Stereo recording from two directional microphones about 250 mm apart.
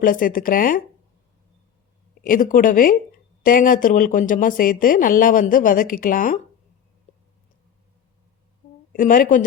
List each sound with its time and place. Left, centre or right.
0.0 s a woman's voice: left
2.2 s a woman's voice: left
8.9 s a woman's voice: left